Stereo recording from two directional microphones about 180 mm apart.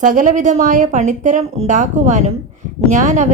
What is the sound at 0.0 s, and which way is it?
A woman's voice, 45° right (ahead or behind).